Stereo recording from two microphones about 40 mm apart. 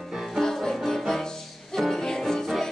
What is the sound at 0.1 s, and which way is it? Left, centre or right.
Music, centre.